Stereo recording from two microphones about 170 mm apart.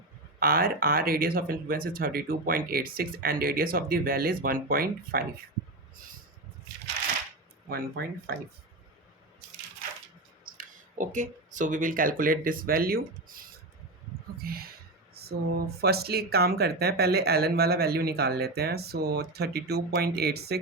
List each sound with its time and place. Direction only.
0.3 s speech: 60° right (ahead or behind)
7.7 s speech: 65° right (ahead or behind)
10.4 s speech: 50° right (ahead or behind); by 20.6 s 70° right (ahead or behind)